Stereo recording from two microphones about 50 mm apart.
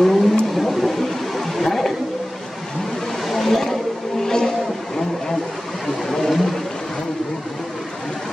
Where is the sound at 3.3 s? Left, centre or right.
Centre.